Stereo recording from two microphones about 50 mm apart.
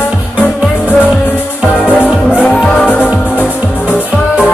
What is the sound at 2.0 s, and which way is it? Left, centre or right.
Music, left.